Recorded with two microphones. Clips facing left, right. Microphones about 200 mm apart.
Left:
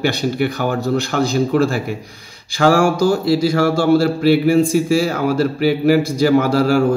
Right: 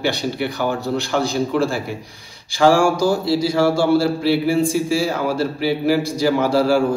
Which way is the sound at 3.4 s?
50° left (ahead or behind).